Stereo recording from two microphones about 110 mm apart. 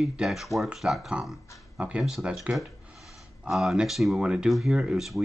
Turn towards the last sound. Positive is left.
turn(degrees=-5)  # may be behind; listen again after turning